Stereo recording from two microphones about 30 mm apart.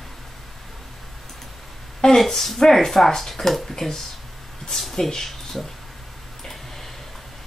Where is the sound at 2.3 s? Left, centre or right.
Centre.